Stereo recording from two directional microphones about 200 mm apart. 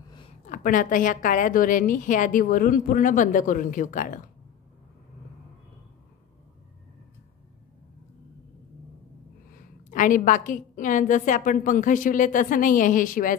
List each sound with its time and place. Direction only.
0.5 s a woman's voice: 40° left (ahead or behind)
9.8 s a woman's voice: 40° left (ahead or behind)